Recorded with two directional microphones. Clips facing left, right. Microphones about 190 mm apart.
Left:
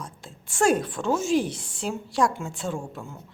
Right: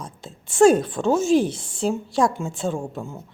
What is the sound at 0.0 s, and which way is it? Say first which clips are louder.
A woman's voice: right 3 dB; 20° right (ahead or behind).